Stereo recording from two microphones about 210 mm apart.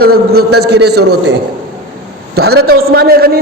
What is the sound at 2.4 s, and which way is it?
Speech, 50° right (ahead or behind).